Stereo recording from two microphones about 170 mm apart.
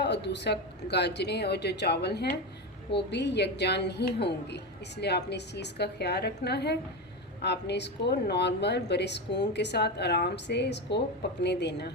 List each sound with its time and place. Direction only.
0.0 s speech: 90° left